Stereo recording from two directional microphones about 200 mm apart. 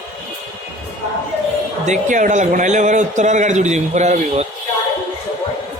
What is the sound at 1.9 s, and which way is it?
A man's voice, 40° right (ahead or behind).